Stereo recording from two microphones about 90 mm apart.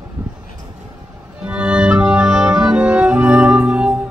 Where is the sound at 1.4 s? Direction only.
15° right (ahead or behind).